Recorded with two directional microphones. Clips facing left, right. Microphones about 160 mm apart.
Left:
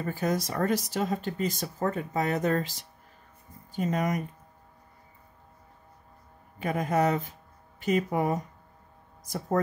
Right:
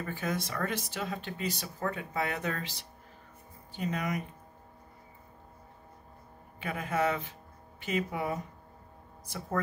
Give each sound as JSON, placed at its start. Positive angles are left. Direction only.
{"t": 0.0, "sound": "speech", "side_deg": 40}
{"t": 6.6, "sound": "speech", "side_deg": 40}